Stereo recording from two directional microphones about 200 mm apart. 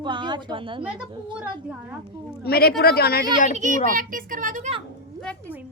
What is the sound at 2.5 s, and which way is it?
Speech, 50° left (ahead or behind).